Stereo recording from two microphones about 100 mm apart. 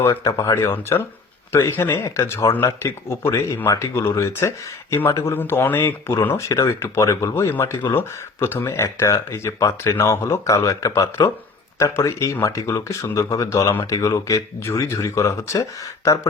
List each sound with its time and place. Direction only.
0.0 s speech: 30° left (ahead or behind)